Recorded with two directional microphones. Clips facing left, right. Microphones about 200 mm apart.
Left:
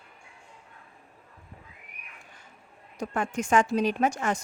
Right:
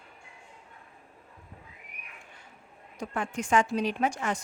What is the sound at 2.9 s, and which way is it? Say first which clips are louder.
A woman's voice: left 3 dB; 45° left (ahead or behind).